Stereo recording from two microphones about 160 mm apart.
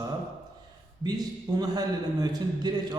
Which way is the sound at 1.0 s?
25° right (ahead or behind).